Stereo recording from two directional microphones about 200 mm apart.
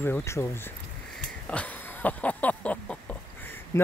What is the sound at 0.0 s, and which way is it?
Speech, 10° left (ahead or behind).